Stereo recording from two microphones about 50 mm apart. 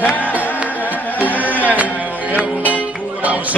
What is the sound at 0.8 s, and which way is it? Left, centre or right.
Music, left.